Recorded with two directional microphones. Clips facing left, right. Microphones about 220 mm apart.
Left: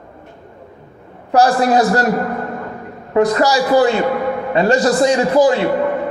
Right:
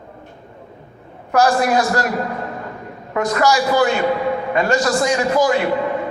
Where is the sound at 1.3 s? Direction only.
35° left (ahead or behind).